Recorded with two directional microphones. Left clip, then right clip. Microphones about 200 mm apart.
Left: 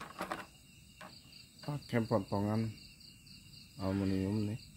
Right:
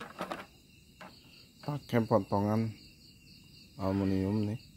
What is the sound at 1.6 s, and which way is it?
Speech, 25° right (ahead or behind).